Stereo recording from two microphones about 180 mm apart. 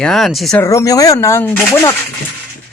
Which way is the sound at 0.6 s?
15° left (ahead or behind).